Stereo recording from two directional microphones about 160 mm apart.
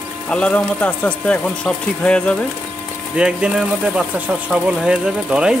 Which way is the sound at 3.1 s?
5° right (ahead or behind).